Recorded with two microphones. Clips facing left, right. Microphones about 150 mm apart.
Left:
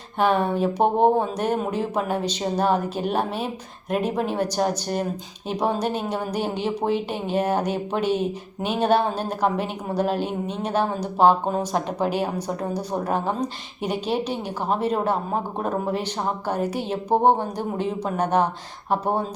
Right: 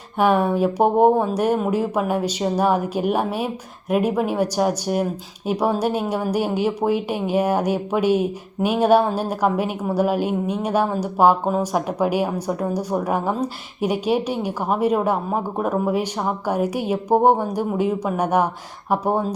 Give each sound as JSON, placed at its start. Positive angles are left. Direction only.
{"t": 0.2, "sound": "a woman's voice", "side_deg": -10}